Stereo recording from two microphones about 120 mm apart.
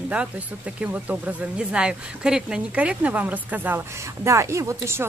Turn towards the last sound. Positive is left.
turn(degrees=-25)  # may be behind; listen again after turning